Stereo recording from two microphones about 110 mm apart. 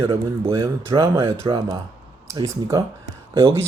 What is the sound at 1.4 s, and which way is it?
Speech, 50° right (ahead or behind).